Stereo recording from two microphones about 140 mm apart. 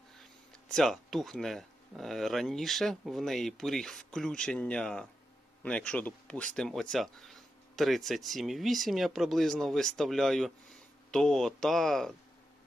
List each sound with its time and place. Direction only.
0.7 s speech: 5° left (ahead or behind)